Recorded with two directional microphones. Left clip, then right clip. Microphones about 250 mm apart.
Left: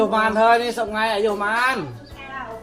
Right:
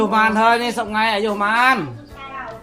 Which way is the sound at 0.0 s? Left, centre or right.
Right.